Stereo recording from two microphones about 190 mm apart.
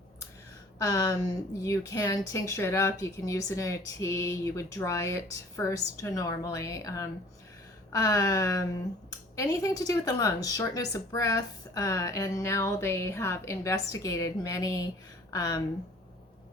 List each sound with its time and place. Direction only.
0.8 s a woman's voice: 20° left (ahead or behind)